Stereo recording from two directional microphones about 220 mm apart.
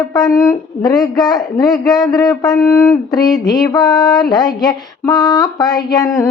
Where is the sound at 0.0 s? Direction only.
15° left (ahead or behind).